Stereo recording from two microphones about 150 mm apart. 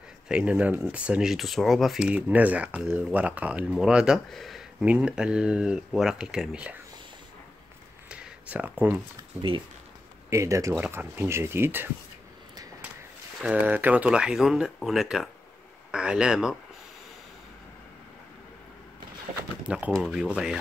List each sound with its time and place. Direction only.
0.3 s speech: 5° right (ahead or behind)
8.1 s a sound: 10° right (ahead or behind)
10.3 s speech: 20° right (ahead or behind)
13.4 s speech: 10° right (ahead or behind)
19.9 s speech: 5° right (ahead or behind)